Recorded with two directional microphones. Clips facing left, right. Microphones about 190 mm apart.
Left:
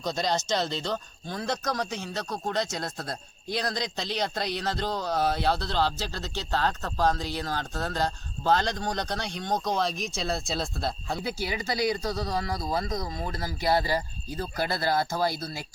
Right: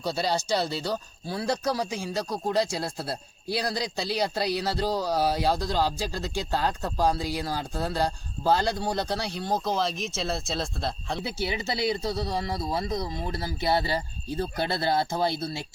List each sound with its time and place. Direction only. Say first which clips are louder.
0.0 s speech: right 1 dB; 10° right (ahead or behind)
11.2 s speech: right 2 dB; 25° right (ahead or behind)